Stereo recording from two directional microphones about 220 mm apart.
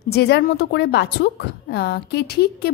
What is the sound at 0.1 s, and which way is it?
A woman's voice, 45° left (ahead or behind).